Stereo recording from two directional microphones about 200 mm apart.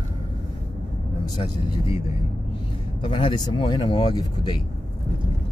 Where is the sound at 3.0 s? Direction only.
25° left (ahead or behind).